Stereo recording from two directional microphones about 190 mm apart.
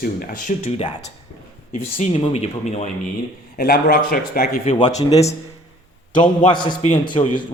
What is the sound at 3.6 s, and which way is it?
Speech, 50° left (ahead or behind).